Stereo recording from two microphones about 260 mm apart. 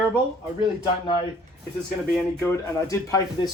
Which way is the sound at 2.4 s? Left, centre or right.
Centre.